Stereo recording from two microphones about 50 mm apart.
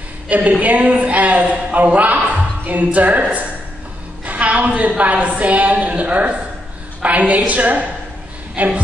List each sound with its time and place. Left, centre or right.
0.3 s a woman's voice: right
4.3 s a woman's voice: right